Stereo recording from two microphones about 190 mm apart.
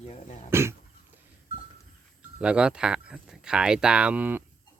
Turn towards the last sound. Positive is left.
turn(degrees=-10)  # may be behind; listen again after turning